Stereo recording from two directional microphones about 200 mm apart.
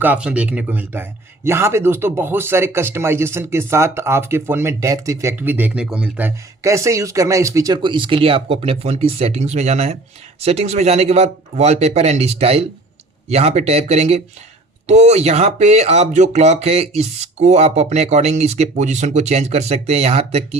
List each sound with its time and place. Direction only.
0.0 s speech: 5° right (ahead or behind); by 20.6 s 30° right (ahead or behind)